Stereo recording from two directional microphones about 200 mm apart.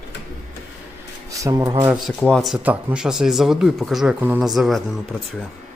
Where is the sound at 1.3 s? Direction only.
15° right (ahead or behind).